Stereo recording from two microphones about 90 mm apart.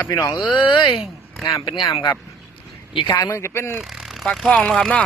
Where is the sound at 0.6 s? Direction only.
60° left (ahead or behind); by 2.0 s 80° left.